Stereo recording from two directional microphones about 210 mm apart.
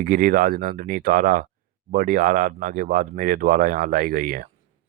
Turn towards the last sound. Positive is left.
turn(degrees=-40)  # may be behind; listen again after turning